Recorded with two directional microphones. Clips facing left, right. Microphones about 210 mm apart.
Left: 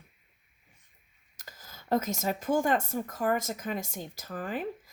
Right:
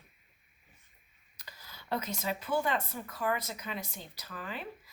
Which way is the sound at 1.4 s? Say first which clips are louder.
Left 2 dB; 45° left (ahead or behind).